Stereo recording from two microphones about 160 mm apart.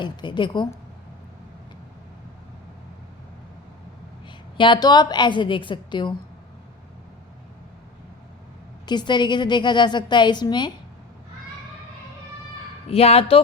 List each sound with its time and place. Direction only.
0.0 s a woman's voice: 30° left (ahead or behind)
4.5 s a woman's voice: 30° left (ahead or behind)
8.9 s a woman's voice: 25° left (ahead or behind)
12.9 s speech: 40° left (ahead or behind)